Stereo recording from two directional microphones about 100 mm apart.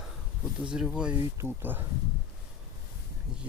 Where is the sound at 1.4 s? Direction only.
20° right (ahead or behind).